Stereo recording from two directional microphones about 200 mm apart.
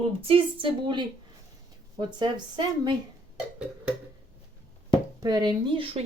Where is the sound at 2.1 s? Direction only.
20° right (ahead or behind).